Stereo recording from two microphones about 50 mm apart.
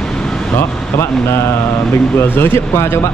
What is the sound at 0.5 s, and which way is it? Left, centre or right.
Speech, left.